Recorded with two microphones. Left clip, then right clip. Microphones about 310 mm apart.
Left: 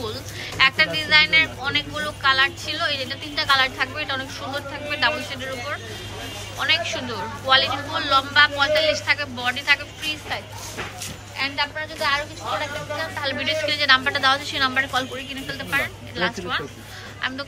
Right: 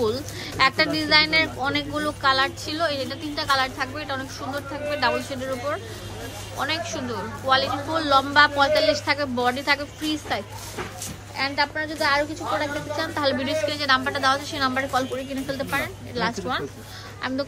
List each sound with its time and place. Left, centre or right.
0.0 s a woman's voice: centre